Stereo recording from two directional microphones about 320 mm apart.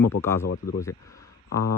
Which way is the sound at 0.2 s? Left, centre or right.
Centre.